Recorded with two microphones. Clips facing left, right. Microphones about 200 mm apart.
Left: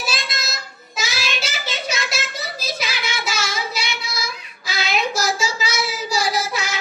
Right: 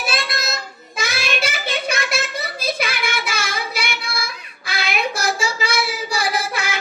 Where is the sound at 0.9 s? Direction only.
55° right (ahead or behind).